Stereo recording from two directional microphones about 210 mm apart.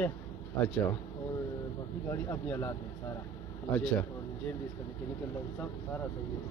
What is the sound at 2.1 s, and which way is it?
Speech, 10° left (ahead or behind).